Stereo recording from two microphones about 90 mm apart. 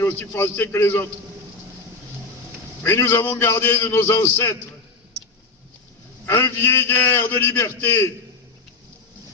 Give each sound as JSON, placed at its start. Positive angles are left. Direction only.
{"t": 0.0, "sound": "a man's voice", "side_deg": 25}
{"t": 2.8, "sound": "a man's voice", "side_deg": 30}
{"t": 6.2, "sound": "a man's voice", "side_deg": 30}